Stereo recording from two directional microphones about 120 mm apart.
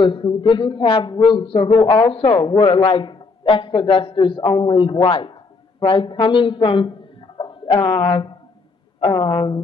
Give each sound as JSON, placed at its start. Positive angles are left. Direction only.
{"t": 0.0, "sound": "speech", "side_deg": 45}
{"t": 6.2, "sound": "a sound", "side_deg": 45}
{"t": 7.8, "sound": "speech", "side_deg": 20}